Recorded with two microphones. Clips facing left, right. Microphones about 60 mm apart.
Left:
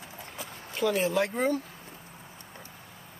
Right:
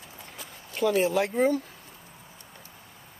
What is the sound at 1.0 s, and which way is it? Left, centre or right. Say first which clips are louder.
Speech: right 3 dB; centre.